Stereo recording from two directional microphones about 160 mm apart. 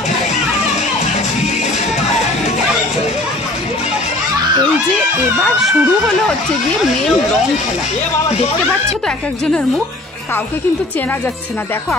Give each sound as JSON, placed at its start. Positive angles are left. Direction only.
{"t": 5.6, "sound": "speech", "side_deg": 0}